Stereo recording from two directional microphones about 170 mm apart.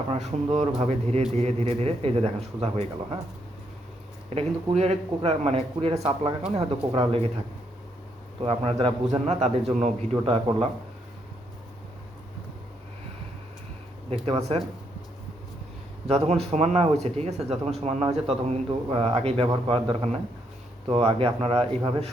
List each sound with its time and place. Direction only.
0.1 s speech: 40° right (ahead or behind)
4.4 s speech: 40° right (ahead or behind)
8.4 s speech: 30° right (ahead or behind)
14.3 s speech: 35° right (ahead or behind)
16.0 s speech: 40° right (ahead or behind)